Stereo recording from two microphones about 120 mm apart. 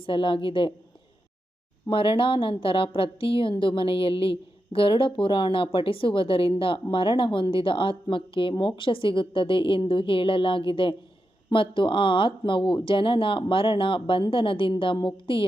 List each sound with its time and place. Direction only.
0.0 s a woman's voice: 45° left (ahead or behind)
1.9 s a woman's voice: 45° left (ahead or behind)